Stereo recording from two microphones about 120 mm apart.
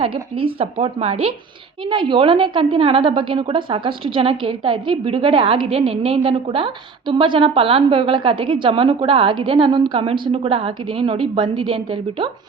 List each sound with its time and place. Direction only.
0.0 s a woman's voice: 50° right (ahead or behind)